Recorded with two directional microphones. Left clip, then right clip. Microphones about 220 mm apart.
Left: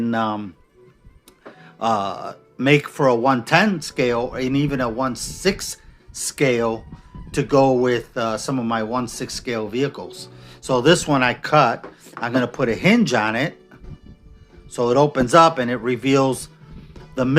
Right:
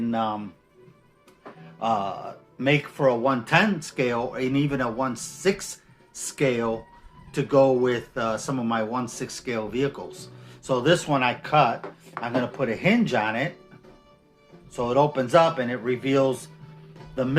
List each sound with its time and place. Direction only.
0.0 s speech: 50° left (ahead or behind)
1.8 s speech: 50° left (ahead or behind)
14.7 s speech: 45° left (ahead or behind)